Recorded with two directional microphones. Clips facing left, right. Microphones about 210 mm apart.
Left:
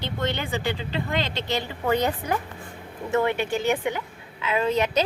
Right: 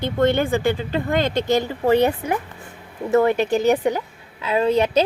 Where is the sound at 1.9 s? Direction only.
25° right (ahead or behind).